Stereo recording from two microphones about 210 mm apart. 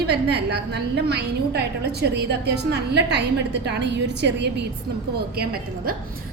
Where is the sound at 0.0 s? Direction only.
50° right (ahead or behind).